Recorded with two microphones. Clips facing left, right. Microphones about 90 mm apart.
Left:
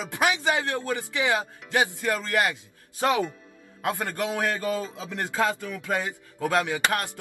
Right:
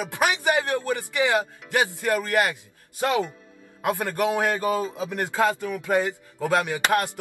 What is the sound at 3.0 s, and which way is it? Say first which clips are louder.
Speech: even; 20° left (ahead or behind).